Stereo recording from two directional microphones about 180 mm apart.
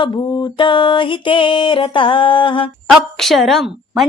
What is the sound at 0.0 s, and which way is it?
Music, 25° left (ahead or behind).